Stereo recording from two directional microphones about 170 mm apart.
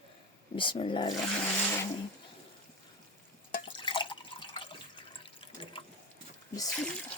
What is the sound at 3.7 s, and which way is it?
Drip, 30° left (ahead or behind).